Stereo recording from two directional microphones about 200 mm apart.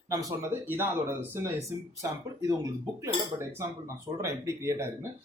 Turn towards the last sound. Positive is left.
turn(degrees=-15)  # may be behind; listen again after turning